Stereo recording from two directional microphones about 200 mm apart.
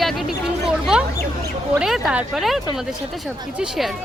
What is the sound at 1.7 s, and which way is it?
Speech, centre (ahead or behind).